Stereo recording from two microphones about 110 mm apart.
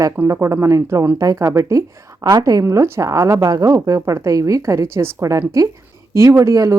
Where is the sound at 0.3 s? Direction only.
30° right (ahead or behind).